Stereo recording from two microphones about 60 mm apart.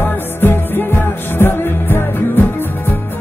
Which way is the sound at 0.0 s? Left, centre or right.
Left.